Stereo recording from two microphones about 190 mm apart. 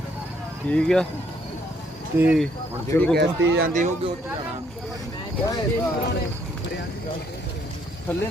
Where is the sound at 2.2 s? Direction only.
5° right (ahead or behind).